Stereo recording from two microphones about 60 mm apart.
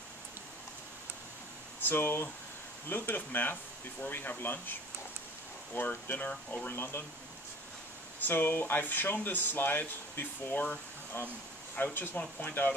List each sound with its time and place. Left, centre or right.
1.8 s speech: left
5.8 s speech: left
8.3 s speech: left